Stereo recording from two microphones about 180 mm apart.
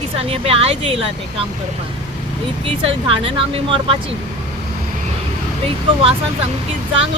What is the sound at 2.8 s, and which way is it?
Speech, 30° right (ahead or behind).